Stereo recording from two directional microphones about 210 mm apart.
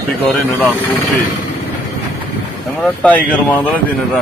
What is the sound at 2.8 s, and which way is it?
Speech, 5° left (ahead or behind).